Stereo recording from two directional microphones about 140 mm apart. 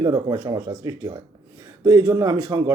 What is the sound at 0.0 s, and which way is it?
A man's voice, 30° right (ahead or behind).